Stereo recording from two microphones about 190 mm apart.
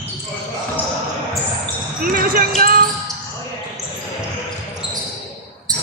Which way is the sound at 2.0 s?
50° right (ahead or behind).